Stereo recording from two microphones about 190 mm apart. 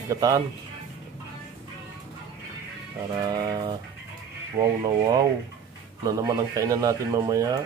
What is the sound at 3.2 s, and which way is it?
Speech, 20° right (ahead or behind).